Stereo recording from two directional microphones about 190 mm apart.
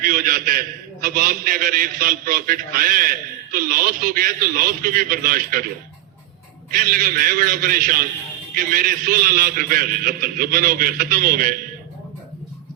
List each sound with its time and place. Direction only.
0.0 s a man's voice: 50° right (ahead or behind)
6.7 s a man's voice: 50° right (ahead or behind)